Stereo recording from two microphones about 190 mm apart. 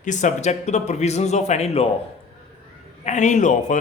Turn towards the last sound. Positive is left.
turn(degrees=40)  # may be behind; listen again after turning